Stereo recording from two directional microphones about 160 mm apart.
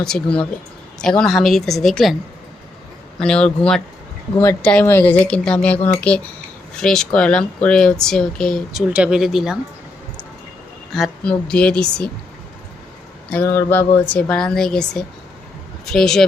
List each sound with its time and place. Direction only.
0.0 s speech: 5° left (ahead or behind)
3.2 s speech: 5° left (ahead or behind)
4.4 s speech: 15° left (ahead or behind); by 9.6 s 5° right (ahead or behind)
10.9 s speech: 5° left (ahead or behind)
13.3 s speech: 15° left (ahead or behind)